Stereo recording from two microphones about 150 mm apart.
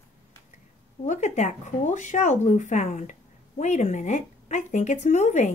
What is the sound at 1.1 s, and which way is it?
Speech, 50° left (ahead or behind).